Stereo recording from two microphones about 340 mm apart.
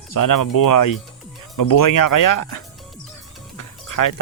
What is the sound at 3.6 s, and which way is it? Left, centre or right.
Music, left.